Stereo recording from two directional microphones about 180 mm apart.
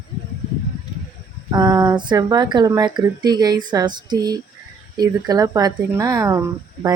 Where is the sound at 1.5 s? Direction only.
20° right (ahead or behind).